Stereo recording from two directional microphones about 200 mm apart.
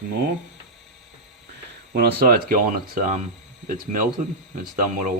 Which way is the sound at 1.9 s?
50° right (ahead or behind).